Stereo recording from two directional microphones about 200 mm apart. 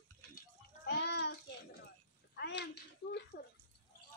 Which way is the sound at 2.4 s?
55° left (ahead or behind).